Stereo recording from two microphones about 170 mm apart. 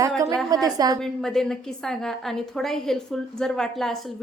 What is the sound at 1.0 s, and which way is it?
A woman's voice, 5° left (ahead or behind).